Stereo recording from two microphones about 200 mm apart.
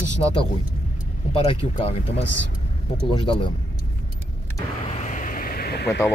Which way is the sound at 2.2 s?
65° left (ahead or behind).